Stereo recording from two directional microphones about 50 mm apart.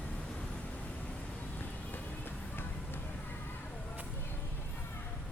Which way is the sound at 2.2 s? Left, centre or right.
Left.